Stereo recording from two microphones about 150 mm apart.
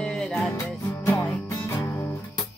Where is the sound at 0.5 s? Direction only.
20° left (ahead or behind).